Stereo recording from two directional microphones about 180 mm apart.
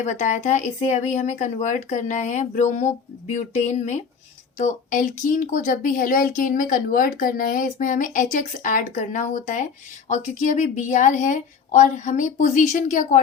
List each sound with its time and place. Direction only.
0.0 s a woman's voice: 40° left (ahead or behind)